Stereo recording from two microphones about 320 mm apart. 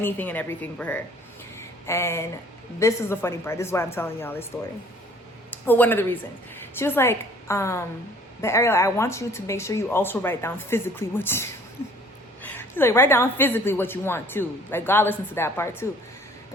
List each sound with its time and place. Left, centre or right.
0.0 s speech: centre
1.5 s a sound: centre
2.7 s a woman's voice: centre
5.5 s a woman's voice: centre